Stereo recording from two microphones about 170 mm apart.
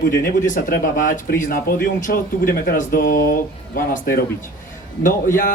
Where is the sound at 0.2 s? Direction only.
55° left (ahead or behind).